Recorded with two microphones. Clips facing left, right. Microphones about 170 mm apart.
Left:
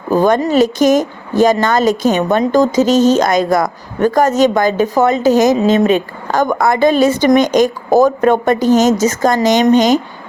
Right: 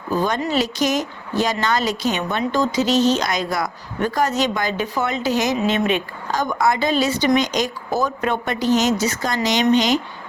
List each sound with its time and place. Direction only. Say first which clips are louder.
0.1 s a woman's voice: left 9 dB; 50° left (ahead or behind)
6.2 s a woman's voice: left 5 dB; 55° left (ahead or behind)